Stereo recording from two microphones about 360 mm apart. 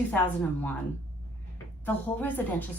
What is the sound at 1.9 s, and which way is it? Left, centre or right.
Speech, centre.